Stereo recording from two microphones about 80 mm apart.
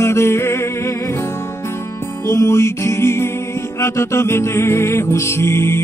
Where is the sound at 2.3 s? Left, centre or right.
Left.